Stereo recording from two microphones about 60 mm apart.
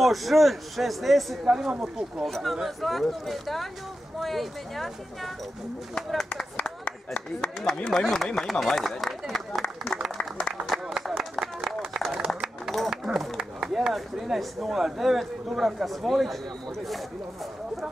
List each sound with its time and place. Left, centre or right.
0.0 s a man's voice: centre
1.4 s a man's voice: centre
7.9 s a man's voice: centre
10.1 s applause: centre
10.7 s run: centre
12.6 s a sound: centre
12.9 s speech: centre